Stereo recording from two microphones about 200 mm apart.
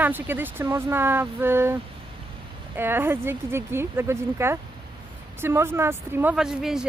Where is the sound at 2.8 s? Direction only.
10° right (ahead or behind).